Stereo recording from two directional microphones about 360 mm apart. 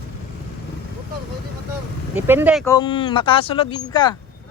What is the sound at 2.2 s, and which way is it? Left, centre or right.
Speech, centre.